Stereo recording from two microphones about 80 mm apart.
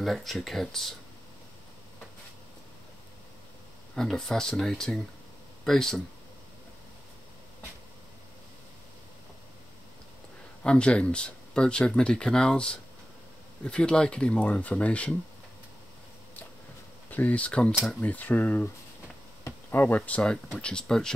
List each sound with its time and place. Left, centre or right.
0.0 s speech: centre
3.9 s speech: centre
10.6 s speech: centre
17.1 s speech: centre
19.7 s speech: left
20.0 s speech: centre